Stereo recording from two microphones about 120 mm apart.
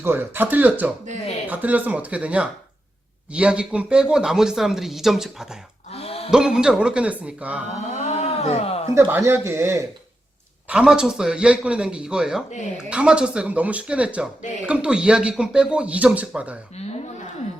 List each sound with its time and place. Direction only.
0.0 s speech: 20° right (ahead or behind)
5.9 s a sound: 55° left (ahead or behind)
6.3 s speech: 5° right (ahead or behind)
8.0 s a sound: 60° left (ahead or behind)
9.0 s speech: 25° right (ahead or behind)
10.7 s speech: 5° right (ahead or behind)
16.8 s speech: 60° left (ahead or behind)